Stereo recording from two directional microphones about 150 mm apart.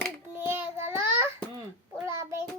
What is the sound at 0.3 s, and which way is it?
Child singing, 15° right (ahead or behind).